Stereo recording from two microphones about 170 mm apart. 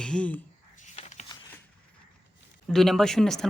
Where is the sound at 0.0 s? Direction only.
5° left (ahead or behind).